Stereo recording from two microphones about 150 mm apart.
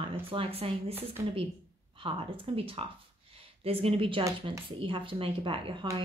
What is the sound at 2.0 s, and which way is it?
Speech, 40° right (ahead or behind).